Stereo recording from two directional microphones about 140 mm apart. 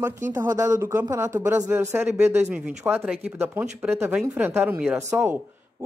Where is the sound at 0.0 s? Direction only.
15° right (ahead or behind).